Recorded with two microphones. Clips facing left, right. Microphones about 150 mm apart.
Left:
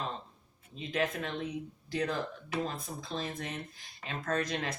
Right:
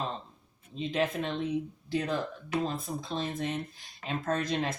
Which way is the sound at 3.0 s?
25° right (ahead or behind).